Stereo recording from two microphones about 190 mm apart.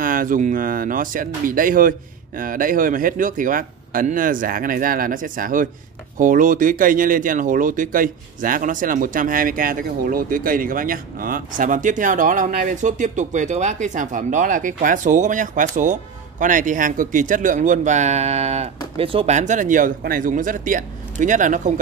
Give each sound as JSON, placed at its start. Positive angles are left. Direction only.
{"t": 0.0, "sound": "speech", "side_deg": -45}